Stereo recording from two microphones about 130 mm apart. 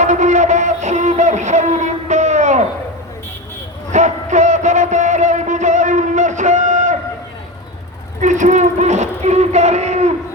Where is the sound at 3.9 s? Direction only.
70° right (ahead or behind).